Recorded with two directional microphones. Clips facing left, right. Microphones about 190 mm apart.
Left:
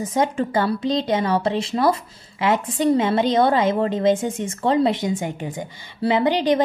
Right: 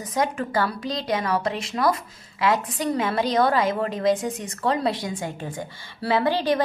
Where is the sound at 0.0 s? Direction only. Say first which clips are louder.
Left 4 dB; 25° left (ahead or behind).